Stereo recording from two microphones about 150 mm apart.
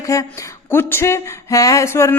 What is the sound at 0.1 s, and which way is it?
Speech, 20° left (ahead or behind).